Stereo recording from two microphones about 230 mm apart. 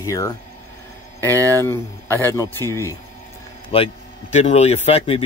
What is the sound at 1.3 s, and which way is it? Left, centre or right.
Speech, centre.